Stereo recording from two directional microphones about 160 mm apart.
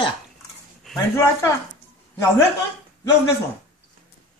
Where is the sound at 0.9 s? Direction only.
Centre (ahead or behind).